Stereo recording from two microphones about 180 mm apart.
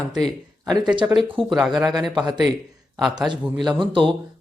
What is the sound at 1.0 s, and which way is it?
Speech, 15° right (ahead or behind).